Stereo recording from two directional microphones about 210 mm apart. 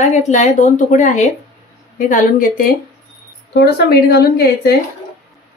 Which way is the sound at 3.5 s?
50° left (ahead or behind).